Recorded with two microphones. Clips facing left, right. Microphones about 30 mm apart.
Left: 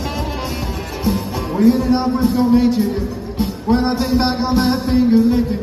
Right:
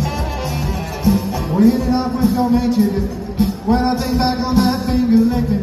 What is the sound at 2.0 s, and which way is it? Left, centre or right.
Music, centre.